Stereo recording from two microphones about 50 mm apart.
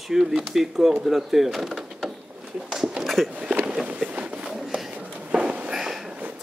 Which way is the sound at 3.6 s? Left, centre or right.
Centre.